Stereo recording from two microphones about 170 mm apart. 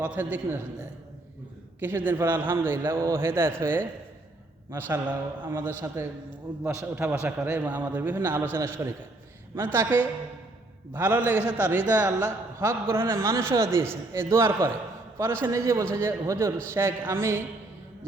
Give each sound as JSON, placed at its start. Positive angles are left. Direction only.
{"t": 0.0, "sound": "a man's voice", "side_deg": -10}
{"t": 1.8, "sound": "a man's voice", "side_deg": -10}